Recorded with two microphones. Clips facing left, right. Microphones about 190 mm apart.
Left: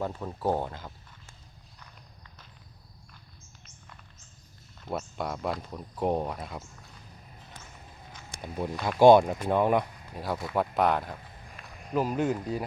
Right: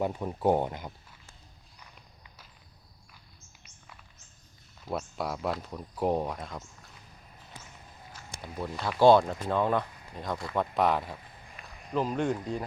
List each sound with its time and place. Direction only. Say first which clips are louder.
0.0 s speech: right 3 dB; 15° right (ahead or behind)
4.9 s speech: even; centre (ahead or behind)
8.4 s speech: left 3 dB; 15° left (ahead or behind)